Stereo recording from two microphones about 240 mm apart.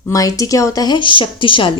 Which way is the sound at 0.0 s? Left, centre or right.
Centre.